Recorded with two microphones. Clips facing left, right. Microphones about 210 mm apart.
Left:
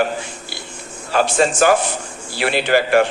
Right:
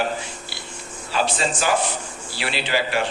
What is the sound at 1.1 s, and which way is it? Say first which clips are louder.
A man's voice: left 7 dB; 50° left (ahead or behind).